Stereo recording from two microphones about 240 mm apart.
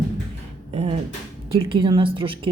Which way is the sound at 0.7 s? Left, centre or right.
Right.